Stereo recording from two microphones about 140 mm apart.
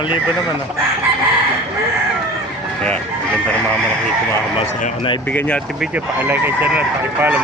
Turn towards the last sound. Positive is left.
turn(degrees=-10)  # may be behind; listen again after turning